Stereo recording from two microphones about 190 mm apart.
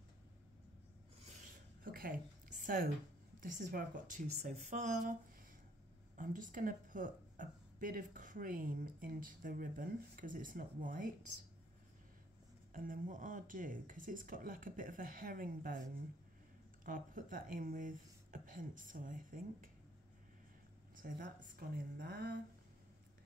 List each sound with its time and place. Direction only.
1.8 s a woman's voice: 50° right (ahead or behind)
6.1 s speech: 45° right (ahead or behind)
12.7 s speech: 45° right (ahead or behind)
20.9 s speech: 50° right (ahead or behind)